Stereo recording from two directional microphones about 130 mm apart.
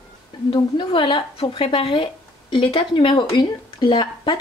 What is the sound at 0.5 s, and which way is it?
Speech, 40° left (ahead or behind).